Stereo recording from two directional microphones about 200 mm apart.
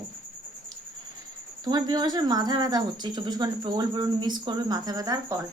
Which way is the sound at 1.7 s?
20° right (ahead or behind).